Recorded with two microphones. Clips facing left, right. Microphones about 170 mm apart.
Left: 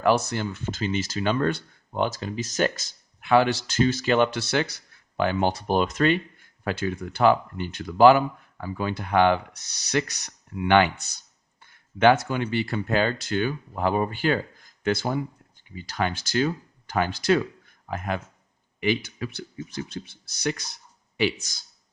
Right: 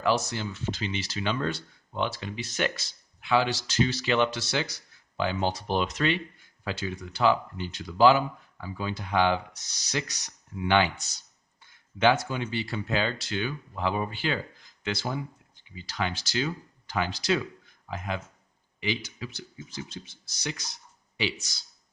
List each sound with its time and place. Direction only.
0.0 s speech: 55° left (ahead or behind)